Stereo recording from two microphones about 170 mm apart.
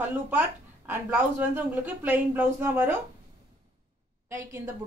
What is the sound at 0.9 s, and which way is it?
A woman's voice, 10° right (ahead or behind).